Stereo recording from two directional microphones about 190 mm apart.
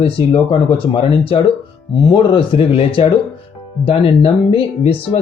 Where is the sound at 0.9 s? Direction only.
25° left (ahead or behind).